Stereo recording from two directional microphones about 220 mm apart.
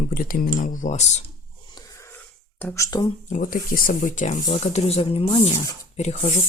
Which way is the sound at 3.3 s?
40° left (ahead or behind).